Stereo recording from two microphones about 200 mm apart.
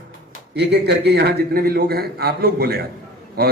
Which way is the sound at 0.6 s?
55° right (ahead or behind).